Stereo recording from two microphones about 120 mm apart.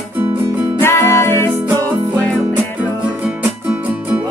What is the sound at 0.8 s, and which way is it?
Music, 20° left (ahead or behind).